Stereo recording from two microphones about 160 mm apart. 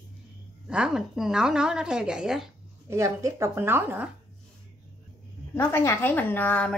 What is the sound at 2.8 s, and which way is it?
Speech, 20° right (ahead or behind).